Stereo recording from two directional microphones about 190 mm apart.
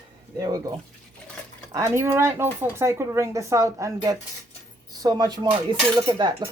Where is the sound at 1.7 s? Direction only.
15° right (ahead or behind).